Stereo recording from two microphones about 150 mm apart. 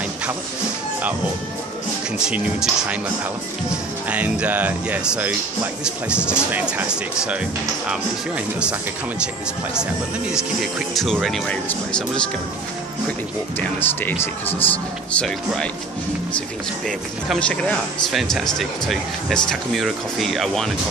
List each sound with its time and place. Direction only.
2.1 s speech: 5° right (ahead or behind)
4.1 s speech: 10° right (ahead or behind)
10.3 s speech: centre (ahead or behind)
13.6 s speech: 15° left (ahead or behind)